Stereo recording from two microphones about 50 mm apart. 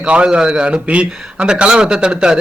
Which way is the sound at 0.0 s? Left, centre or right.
Right.